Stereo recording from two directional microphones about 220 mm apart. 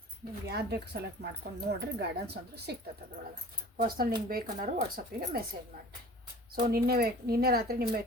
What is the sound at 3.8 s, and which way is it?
Speech, 40° right (ahead or behind).